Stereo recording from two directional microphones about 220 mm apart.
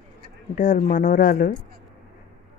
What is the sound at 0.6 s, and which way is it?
Speech, 35° left (ahead or behind).